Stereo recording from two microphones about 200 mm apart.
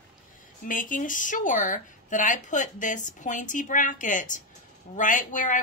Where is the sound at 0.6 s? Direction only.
40° left (ahead or behind).